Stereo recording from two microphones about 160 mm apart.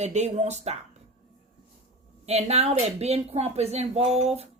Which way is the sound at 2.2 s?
40° right (ahead or behind).